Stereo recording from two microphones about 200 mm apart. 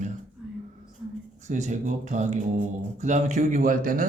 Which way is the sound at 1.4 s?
35° right (ahead or behind).